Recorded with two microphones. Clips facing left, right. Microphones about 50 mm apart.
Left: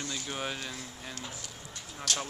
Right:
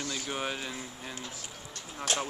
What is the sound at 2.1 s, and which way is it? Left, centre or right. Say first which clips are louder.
Speech: right 2 dB; right.